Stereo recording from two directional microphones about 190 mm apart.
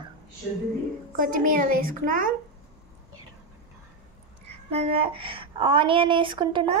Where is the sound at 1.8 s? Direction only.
45° right (ahead or behind).